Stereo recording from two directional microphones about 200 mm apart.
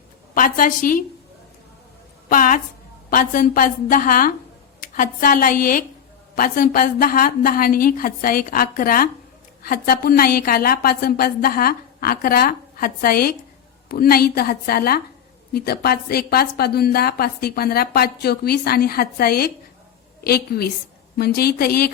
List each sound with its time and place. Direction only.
0.3 s a woman's voice: 40° left (ahead or behind)
2.3 s a woman's voice: 40° left (ahead or behind)